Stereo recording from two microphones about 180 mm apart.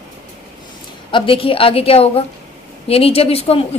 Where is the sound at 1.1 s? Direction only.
25° left (ahead or behind).